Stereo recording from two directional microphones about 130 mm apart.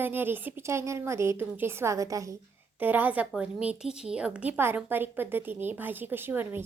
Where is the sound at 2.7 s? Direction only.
15° right (ahead or behind).